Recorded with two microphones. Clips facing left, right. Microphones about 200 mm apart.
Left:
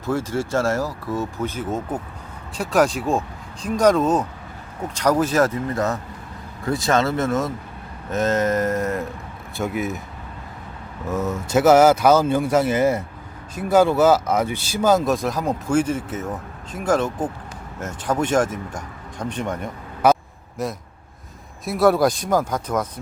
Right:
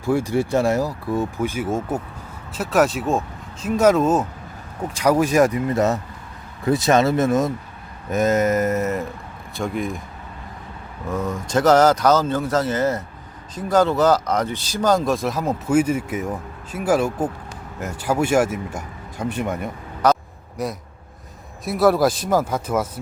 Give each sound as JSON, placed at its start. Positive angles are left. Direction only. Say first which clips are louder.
{"t": 0.0, "sound": "speech", "louder": "right 3 dB", "side_deg": -15}
{"t": 11.0, "sound": "speech", "louder": "left 1 dB", "side_deg": 5}
{"t": 20.0, "sound": "a sound", "louder": "left 1 dB", "side_deg": 10}
{"t": 21.6, "sound": "speech", "louder": "even", "side_deg": 0}